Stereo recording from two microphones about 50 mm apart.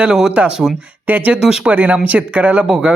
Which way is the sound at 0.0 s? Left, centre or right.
Centre.